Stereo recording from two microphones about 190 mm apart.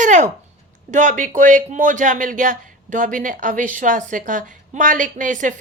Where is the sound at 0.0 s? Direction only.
40° right (ahead or behind).